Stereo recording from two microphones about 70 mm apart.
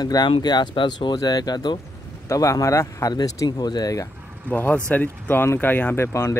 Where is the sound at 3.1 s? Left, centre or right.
Left.